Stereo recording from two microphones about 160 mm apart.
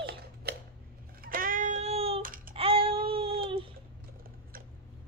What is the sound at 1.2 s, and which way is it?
Child singing, 60° right (ahead or behind).